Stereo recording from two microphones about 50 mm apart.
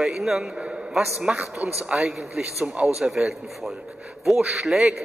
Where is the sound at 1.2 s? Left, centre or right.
Right.